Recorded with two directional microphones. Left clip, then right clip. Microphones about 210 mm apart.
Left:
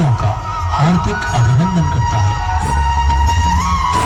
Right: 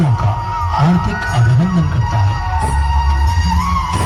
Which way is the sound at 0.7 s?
35° left (ahead or behind).